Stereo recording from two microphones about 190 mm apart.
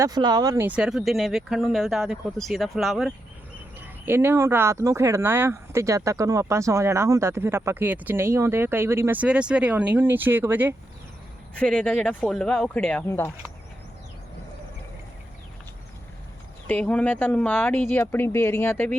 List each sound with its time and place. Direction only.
0.0 s speech: 20° right (ahead or behind)
0.8 s speech: centre (ahead or behind)
11.6 s speech: 5° left (ahead or behind)
16.6 s speech: 5° left (ahead or behind)